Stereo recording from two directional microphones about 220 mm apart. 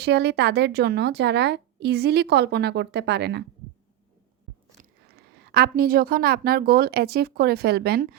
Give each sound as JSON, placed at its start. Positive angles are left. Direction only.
{"t": 0.0, "sound": "a woman's voice", "side_deg": -50}
{"t": 4.8, "sound": "speech", "side_deg": -45}